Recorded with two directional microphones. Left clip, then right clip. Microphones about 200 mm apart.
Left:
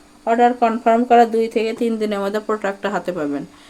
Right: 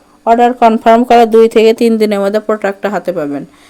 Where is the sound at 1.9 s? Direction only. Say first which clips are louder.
Right 10 dB; 35° right (ahead or behind).